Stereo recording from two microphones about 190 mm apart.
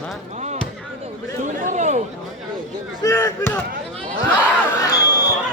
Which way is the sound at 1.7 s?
35° right (ahead or behind).